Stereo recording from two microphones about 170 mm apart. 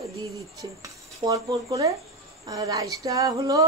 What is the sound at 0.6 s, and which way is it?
Speech, 20° right (ahead or behind).